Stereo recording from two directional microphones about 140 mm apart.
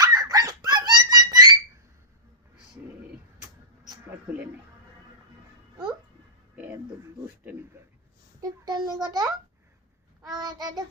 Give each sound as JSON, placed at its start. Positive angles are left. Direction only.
{"t": 0.0, "sound": "a sound", "side_deg": -25}
{"t": 8.4, "sound": "a child's voice", "side_deg": -30}
{"t": 10.3, "sound": "a child's voice", "side_deg": -25}